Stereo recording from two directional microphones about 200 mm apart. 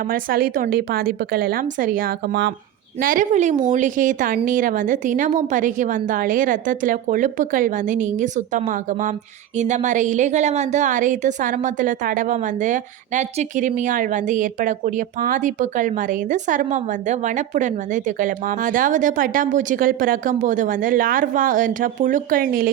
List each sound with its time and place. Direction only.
0.1 s a woman's voice: 45° right (ahead or behind)